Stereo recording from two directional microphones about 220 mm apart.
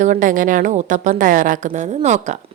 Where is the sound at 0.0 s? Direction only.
35° right (ahead or behind).